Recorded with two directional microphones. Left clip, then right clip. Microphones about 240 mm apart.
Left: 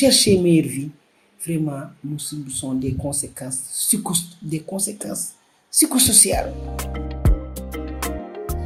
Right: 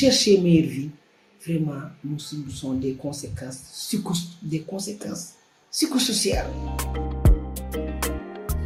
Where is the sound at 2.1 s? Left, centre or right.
Left.